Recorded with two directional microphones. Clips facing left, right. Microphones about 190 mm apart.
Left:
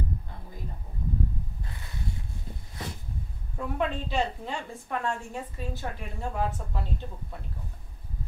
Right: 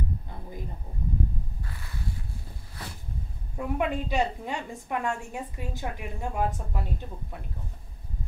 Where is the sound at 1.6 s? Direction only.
20° left (ahead or behind).